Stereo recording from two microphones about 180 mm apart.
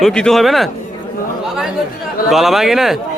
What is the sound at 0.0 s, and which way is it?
Speech, 5° left (ahead or behind).